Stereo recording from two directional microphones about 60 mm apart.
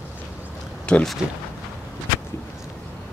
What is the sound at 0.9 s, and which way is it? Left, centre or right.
Speech, centre.